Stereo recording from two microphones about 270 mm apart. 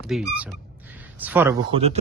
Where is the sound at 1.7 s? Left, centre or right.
Right.